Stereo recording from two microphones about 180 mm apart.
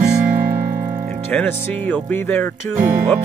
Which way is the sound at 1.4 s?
10° left (ahead or behind).